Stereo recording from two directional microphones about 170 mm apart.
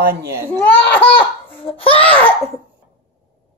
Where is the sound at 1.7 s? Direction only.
35° left (ahead or behind).